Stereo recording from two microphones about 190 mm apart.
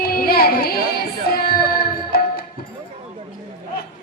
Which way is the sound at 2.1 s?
55° left (ahead or behind).